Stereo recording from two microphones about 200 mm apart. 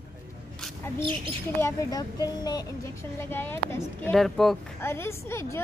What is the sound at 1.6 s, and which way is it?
A man's voice, 20° left (ahead or behind).